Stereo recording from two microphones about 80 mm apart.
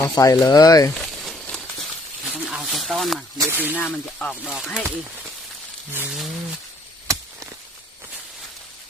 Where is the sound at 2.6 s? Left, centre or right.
Centre.